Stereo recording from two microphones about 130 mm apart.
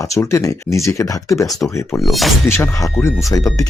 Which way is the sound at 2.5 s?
20° left (ahead or behind).